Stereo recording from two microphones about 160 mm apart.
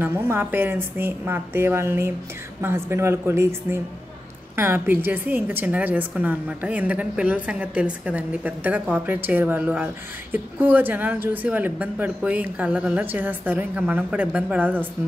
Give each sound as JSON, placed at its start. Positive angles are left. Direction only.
{"t": 0.0, "sound": "a woman's voice", "side_deg": -15}